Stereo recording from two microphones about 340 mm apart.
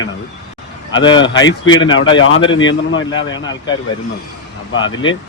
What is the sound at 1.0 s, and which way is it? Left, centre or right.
Speech, centre.